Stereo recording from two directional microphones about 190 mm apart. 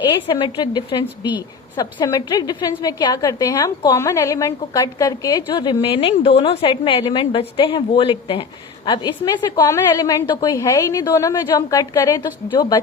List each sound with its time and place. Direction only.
0.3 s a woman's voice: 25° left (ahead or behind)